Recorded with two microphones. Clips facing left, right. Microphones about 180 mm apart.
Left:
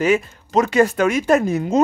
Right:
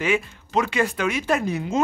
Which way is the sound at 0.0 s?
40° left (ahead or behind).